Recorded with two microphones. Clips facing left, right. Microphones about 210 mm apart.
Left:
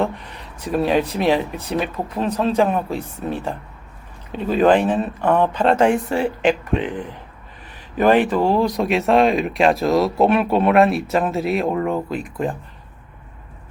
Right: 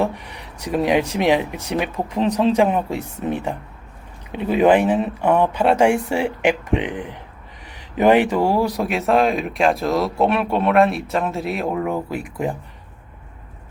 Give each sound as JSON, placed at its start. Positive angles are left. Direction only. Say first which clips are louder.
{"t": 0.0, "sound": "speech", "louder": "even", "side_deg": -15}